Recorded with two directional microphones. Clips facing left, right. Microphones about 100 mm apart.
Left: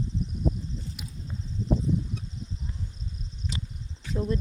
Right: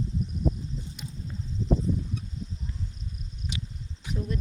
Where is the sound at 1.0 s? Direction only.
5° left (ahead or behind).